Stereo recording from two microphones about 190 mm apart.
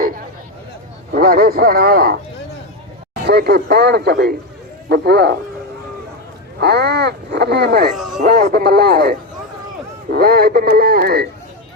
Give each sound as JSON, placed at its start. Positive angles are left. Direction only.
{"t": 1.1, "sound": "speech", "side_deg": -55}
{"t": 3.2, "sound": "speech", "side_deg": -55}
{"t": 6.6, "sound": "speech", "side_deg": -60}
{"t": 7.9, "sound": "music", "side_deg": 0}
{"t": 8.2, "sound": "speech", "side_deg": -55}